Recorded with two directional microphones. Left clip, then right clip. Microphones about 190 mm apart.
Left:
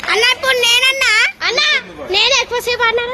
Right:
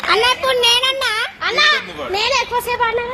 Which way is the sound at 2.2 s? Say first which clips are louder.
Left 3 dB; 90° left.